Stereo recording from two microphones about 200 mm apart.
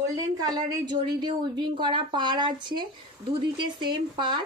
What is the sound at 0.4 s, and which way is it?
A woman's voice, 20° right (ahead or behind).